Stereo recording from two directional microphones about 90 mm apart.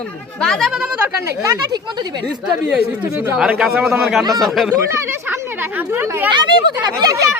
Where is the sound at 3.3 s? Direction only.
5° right (ahead or behind).